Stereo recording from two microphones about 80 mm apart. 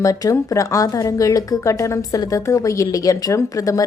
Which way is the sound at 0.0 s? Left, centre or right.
Left.